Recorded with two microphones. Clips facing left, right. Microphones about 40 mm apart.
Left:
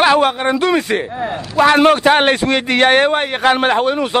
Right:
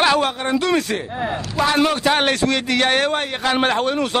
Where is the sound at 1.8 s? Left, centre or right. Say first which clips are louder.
Left 6 dB; left.